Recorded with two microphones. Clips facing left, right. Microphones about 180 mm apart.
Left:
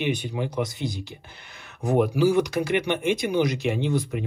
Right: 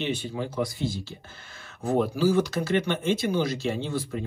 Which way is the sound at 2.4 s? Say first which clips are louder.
Left 2 dB; 15° left (ahead or behind).